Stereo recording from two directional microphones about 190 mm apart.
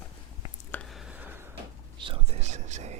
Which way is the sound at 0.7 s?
5° left (ahead or behind).